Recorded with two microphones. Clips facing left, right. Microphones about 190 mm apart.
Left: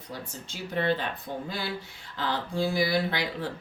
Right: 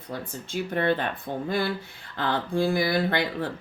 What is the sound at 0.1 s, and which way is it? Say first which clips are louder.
Speech: right 7 dB; 55° right (ahead or behind).